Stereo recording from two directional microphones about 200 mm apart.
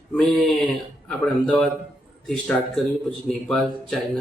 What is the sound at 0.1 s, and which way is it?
A man's voice, 5° left (ahead or behind).